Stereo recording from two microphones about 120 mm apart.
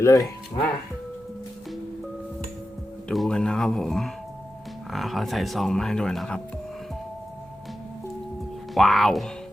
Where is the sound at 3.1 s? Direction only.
5° left (ahead or behind).